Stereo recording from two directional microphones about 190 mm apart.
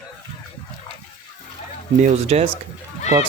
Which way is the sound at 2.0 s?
35° right (ahead or behind).